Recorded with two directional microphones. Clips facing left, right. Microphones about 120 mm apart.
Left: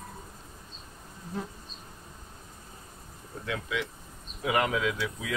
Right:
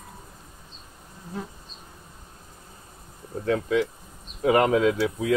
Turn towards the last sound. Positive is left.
turn(degrees=-35)  # may be behind; listen again after turning